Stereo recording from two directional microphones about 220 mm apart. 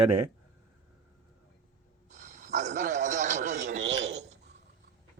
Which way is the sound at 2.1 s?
35° right (ahead or behind).